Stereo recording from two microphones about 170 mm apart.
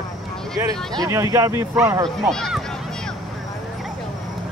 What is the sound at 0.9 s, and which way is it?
Speech, 20° right (ahead or behind).